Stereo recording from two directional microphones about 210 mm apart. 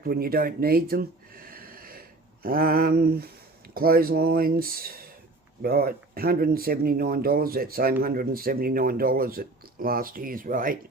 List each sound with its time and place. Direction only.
0.0 s speech: 45° right (ahead or behind)